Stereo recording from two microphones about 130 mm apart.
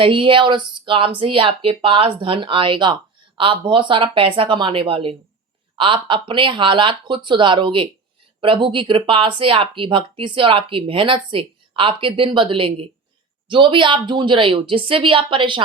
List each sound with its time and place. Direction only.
0.0 s speech: 40° right (ahead or behind)